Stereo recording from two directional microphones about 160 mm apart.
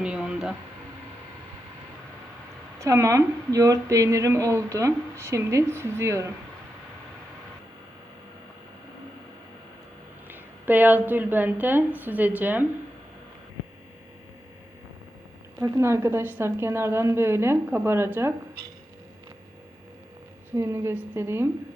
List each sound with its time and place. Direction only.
0.0 s speech: 5° right (ahead or behind)
2.7 s a woman's voice: 20° right (ahead or behind)
10.2 s a woman's voice: 10° right (ahead or behind)
15.6 s a woman's voice: 20° right (ahead or behind)
20.6 s a woman's voice: 15° right (ahead or behind)